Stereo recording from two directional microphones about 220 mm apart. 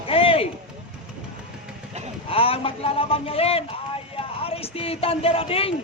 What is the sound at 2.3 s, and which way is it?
A man's voice, 25° left (ahead or behind).